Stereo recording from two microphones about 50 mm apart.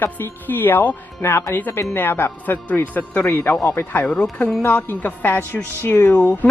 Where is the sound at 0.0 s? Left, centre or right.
Left.